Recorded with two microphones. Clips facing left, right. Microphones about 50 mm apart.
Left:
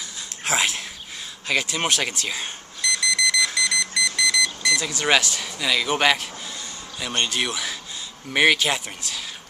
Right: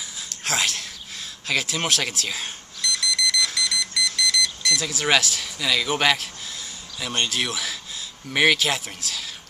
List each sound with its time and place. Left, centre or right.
0.4 s a sound: centre
1.5 s alarm clock: centre
7.0 s speech: centre